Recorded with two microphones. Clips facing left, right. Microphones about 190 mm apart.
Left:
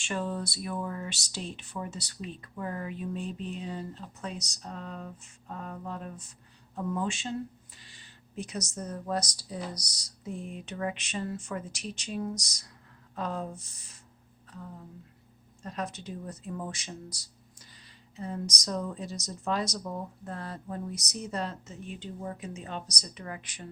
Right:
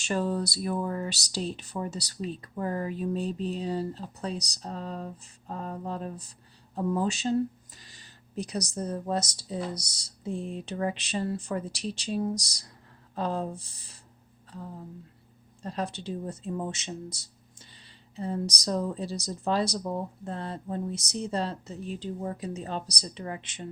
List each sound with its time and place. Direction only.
0.0 s speech: 35° right (ahead or behind)
15.6 s speech: 30° right (ahead or behind)